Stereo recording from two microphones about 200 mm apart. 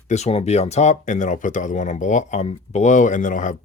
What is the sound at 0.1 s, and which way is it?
Speech, 30° left (ahead or behind).